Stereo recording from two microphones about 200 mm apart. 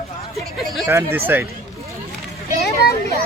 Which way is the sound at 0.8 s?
10° right (ahead or behind).